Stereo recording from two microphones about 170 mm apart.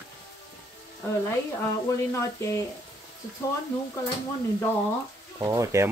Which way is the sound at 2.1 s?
20° left (ahead or behind).